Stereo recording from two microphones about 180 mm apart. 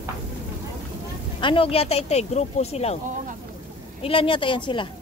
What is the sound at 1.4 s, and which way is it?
Speech, 30° left (ahead or behind).